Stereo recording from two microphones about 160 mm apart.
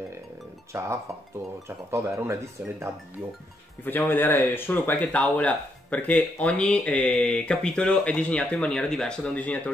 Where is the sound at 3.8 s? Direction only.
10° left (ahead or behind).